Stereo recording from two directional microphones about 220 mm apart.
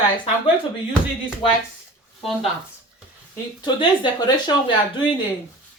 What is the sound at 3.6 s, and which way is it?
Speech, 20° left (ahead or behind).